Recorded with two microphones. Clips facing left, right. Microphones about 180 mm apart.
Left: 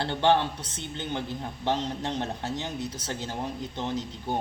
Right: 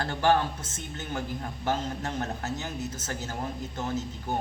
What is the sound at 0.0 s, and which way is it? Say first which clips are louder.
Speech: left 1 dB; 25° left (ahead or behind).